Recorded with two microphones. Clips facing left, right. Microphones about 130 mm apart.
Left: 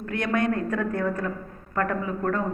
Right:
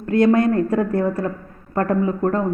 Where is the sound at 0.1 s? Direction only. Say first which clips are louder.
Right 10 dB; 30° right (ahead or behind).